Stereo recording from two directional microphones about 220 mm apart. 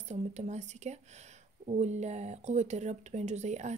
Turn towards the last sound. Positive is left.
turn(degrees=-30)  # may be behind; listen again after turning